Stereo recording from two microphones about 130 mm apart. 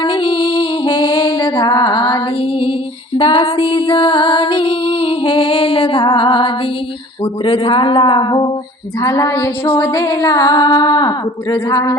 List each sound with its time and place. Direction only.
0.0 s music: 40° left (ahead or behind)
9.0 s music: 25° left (ahead or behind)